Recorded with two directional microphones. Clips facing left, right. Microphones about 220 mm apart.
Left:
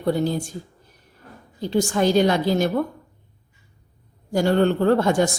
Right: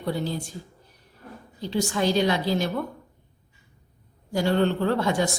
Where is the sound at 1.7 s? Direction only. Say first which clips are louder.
Left 5 dB; 50° left (ahead or behind).